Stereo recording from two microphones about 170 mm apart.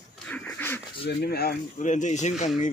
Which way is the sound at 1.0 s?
70° left (ahead or behind).